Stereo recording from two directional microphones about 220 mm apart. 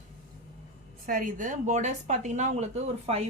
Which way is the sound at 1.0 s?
35° right (ahead or behind).